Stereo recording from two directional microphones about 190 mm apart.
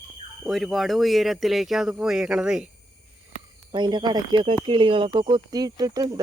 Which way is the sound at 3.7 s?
25° right (ahead or behind).